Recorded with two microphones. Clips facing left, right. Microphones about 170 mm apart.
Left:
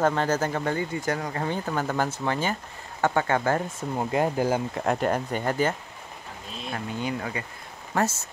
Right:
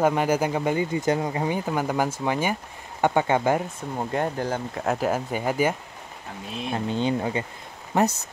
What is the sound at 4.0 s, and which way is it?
Speech, 5° left (ahead or behind).